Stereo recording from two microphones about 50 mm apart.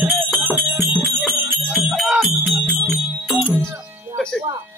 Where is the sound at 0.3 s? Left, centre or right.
Right.